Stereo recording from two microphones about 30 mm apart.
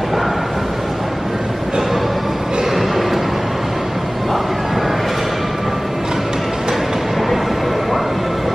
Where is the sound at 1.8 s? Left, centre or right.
Centre.